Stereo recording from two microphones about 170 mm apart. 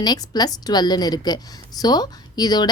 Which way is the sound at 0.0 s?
25° left (ahead or behind).